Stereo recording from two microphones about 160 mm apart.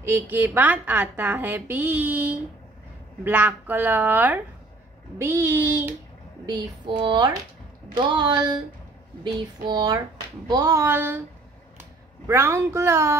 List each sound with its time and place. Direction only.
0.0 s a woman's voice: 15° right (ahead or behind)
7.0 s a woman's voice: 30° right (ahead or behind); by 11.2 s 15° right (ahead or behind)
12.3 s a woman's voice: 15° right (ahead or behind)